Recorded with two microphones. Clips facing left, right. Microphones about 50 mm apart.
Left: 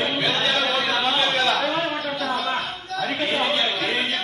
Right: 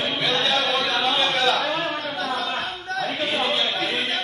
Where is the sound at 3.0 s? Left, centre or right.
Left.